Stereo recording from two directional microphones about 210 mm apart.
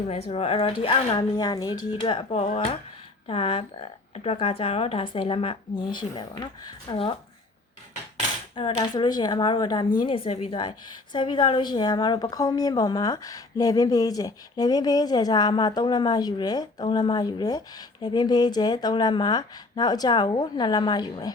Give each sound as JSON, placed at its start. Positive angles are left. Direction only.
{"t": 0.1, "sound": "speech", "side_deg": 30}
{"t": 8.5, "sound": "speech", "side_deg": 20}